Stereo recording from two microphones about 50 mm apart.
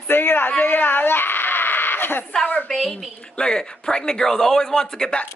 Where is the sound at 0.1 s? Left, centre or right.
Left.